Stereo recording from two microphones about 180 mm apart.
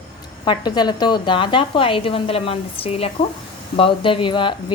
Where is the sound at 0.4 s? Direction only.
25° left (ahead or behind).